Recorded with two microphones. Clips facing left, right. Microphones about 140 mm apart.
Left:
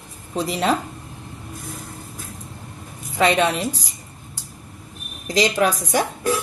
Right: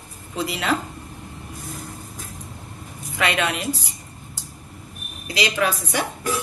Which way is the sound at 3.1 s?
35° left (ahead or behind).